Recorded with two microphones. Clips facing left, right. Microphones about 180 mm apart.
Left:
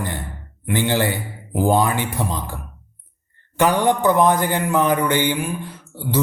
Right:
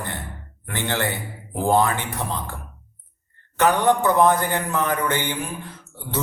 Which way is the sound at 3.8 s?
15° left (ahead or behind).